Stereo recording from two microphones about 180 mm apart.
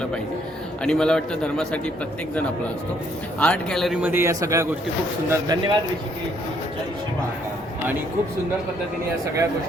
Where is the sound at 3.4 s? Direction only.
5° left (ahead or behind); by 5.7 s 25° right (ahead or behind).